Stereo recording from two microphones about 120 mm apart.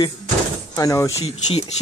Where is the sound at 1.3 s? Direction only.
55° left (ahead or behind).